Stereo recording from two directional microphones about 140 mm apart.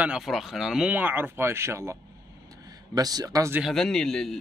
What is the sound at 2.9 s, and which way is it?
Speech, 25° right (ahead or behind).